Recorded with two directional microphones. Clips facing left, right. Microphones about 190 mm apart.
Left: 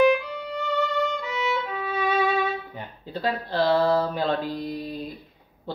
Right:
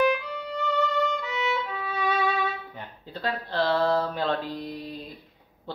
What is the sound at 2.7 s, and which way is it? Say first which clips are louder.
A woman's voice: left 5 dB; 10° left (ahead or behind).